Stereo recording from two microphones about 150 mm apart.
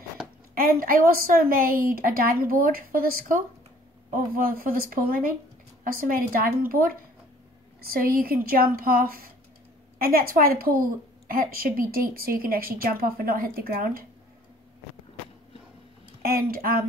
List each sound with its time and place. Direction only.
0.6 s a woman's voice: 75° right (ahead or behind)
16.2 s speech: 85° right